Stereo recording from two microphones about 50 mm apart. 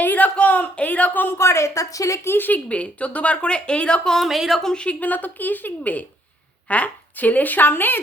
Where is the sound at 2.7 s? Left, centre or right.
Left.